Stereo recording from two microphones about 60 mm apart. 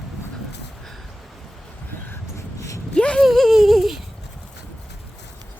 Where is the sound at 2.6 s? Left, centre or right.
Left.